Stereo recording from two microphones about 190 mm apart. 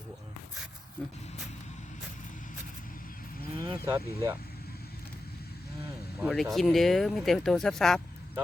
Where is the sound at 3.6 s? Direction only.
15° right (ahead or behind).